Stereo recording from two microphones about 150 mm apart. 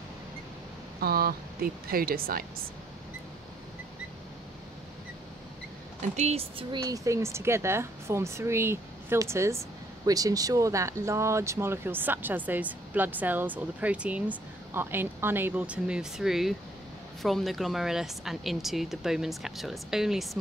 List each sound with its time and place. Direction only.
1.0 s speech: 85° right
6.1 s speech: 50° right (ahead or behind)
6.7 s speech: 25° right (ahead or behind); by 20.2 s 5° right (ahead or behind)